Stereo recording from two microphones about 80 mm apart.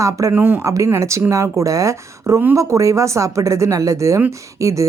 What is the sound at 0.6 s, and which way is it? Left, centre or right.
A woman's voice, right.